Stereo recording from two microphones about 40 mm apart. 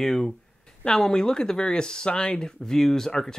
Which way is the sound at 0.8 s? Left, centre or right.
Centre.